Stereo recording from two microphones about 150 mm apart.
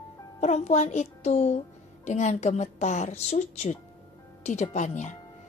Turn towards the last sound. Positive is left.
turn(degrees=55)  # may be behind; listen again after turning